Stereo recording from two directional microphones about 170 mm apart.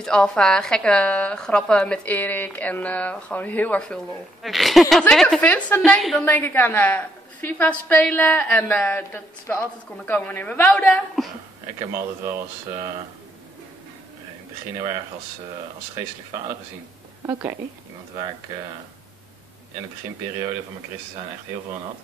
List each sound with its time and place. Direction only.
0.0 s a woman's voice: 5° left (ahead or behind)
11.8 s speech: 15° right (ahead or behind)
17.3 s speech: 15° right (ahead or behind)